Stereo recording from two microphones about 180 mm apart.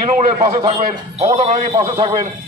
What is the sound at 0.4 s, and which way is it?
A man's voice, 30° right (ahead or behind).